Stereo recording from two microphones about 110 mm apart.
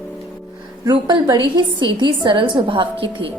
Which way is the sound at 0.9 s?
35° right (ahead or behind).